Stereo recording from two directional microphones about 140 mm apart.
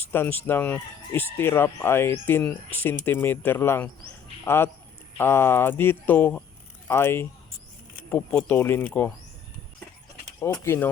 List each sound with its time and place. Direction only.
0.1 s speech: 15° left (ahead or behind)
10.4 s speech: 20° left (ahead or behind)